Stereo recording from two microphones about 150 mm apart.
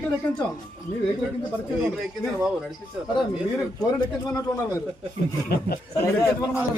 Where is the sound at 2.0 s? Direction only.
5° right (ahead or behind).